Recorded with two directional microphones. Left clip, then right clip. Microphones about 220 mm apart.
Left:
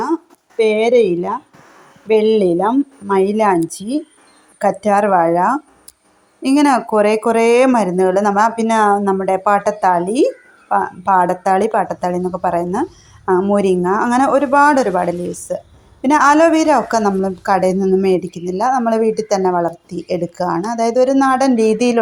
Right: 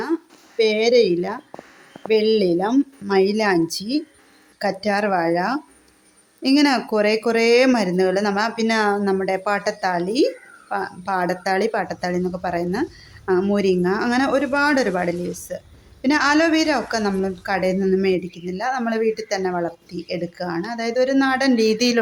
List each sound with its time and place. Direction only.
0.0 s a sound: 5° left (ahead or behind)
2.0 s speech: 5° left (ahead or behind)
14.8 s a woman's voice: centre (ahead or behind)
17.0 s speech: centre (ahead or behind)
17.4 s speech: 15° left (ahead or behind)